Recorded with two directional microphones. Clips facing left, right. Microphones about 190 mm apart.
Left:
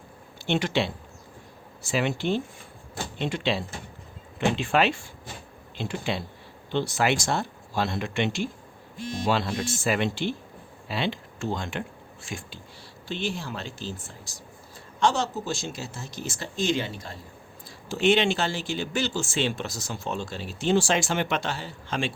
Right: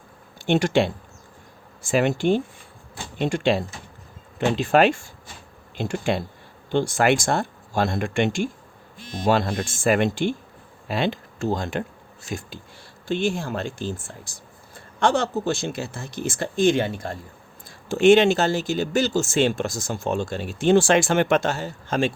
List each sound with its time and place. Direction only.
0.4 s speech: 45° right (ahead or behind)